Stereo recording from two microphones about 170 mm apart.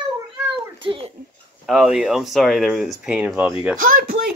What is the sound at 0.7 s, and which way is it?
Speech, 30° right (ahead or behind).